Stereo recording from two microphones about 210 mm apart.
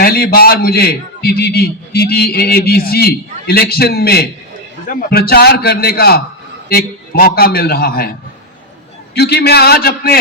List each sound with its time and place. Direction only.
0.0 s a man's voice: 45° left (ahead or behind)
9.1 s a man's voice: 50° left (ahead or behind)